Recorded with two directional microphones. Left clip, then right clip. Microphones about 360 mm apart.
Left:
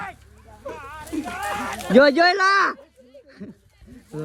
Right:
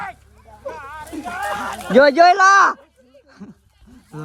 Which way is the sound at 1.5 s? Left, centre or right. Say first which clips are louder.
Right 2 dB; centre.